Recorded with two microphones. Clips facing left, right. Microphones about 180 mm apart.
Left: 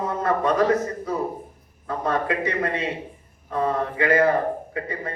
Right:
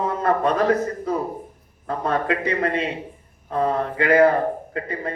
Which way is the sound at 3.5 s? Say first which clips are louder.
Right 2 dB; 60° right (ahead or behind).